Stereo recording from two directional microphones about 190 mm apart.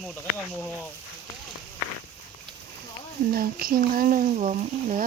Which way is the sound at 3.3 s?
50° right (ahead or behind).